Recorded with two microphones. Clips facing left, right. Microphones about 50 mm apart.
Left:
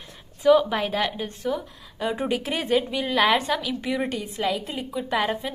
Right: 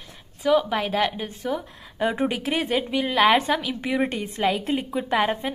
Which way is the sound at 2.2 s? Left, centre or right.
Centre.